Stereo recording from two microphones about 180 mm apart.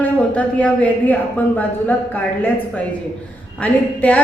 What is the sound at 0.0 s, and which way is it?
A woman's voice, 10° left (ahead or behind).